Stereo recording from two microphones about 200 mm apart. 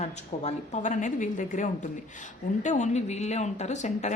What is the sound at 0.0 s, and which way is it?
Speech, 35° left (ahead or behind).